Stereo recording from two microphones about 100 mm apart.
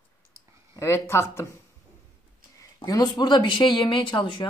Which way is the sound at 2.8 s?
40° left (ahead or behind).